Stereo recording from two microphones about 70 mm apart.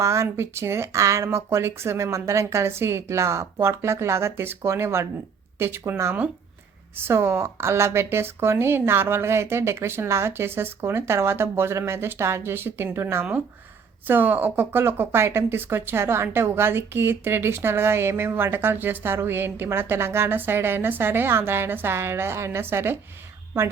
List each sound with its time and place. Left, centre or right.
0.0 s speech: right
6.9 s speech: right
14.1 s speech: right